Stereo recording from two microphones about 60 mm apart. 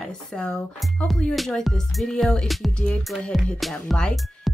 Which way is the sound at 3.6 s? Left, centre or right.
Centre.